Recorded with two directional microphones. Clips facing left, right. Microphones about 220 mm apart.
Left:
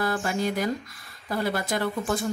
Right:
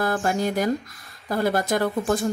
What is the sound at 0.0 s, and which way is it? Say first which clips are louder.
A woman's voice: right 3 dB; 45° right (ahead or behind).